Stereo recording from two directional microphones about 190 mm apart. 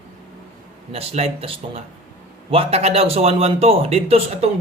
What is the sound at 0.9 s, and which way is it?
Speech, 30° right (ahead or behind).